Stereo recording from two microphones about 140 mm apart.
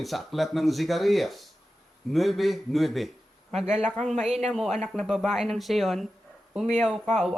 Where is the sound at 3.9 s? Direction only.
5° left (ahead or behind).